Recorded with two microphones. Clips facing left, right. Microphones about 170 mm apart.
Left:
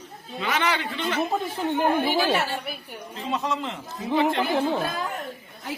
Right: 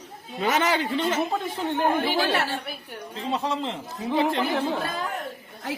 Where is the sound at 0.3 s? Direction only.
40° right (ahead or behind).